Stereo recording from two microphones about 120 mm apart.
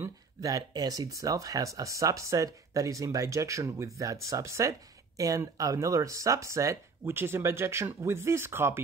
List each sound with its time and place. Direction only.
0.4 s speech: 30° right (ahead or behind)